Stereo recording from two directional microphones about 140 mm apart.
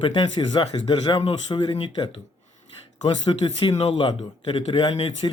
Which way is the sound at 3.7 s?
45° left (ahead or behind).